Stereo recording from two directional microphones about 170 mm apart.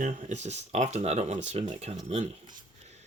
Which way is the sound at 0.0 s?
45° right (ahead or behind).